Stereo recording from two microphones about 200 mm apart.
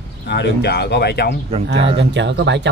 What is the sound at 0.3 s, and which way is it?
Speech, 55° left (ahead or behind).